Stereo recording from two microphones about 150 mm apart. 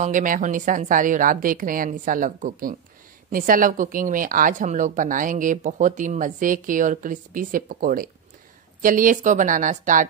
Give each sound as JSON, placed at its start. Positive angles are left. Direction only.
{"t": 0.0, "sound": "a woman's voice", "side_deg": -60}